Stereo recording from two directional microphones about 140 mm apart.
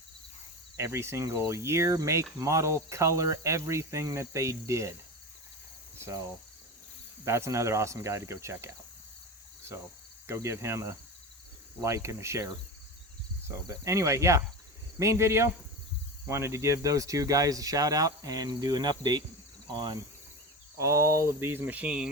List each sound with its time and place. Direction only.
0.8 s cricket: 20° right (ahead or behind)
7.3 s cricket: 20° right (ahead or behind)
9.7 s cricket: 20° right (ahead or behind)
20.7 s speech: 20° right (ahead or behind)